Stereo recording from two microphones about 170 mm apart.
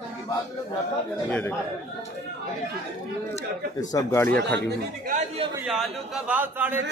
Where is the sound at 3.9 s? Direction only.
15° left (ahead or behind).